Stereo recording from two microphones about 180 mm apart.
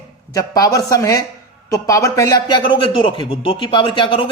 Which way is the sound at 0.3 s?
20° left (ahead or behind).